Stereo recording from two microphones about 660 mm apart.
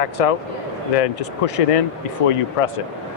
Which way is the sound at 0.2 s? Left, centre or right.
Left.